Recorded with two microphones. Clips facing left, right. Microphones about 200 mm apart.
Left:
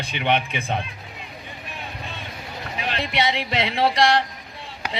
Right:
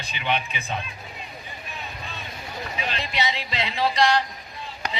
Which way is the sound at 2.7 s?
60° left (ahead or behind).